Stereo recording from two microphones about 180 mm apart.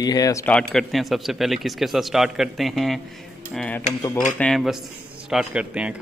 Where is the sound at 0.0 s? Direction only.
20° left (ahead or behind).